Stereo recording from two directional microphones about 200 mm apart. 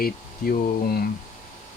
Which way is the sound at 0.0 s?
50° left (ahead or behind).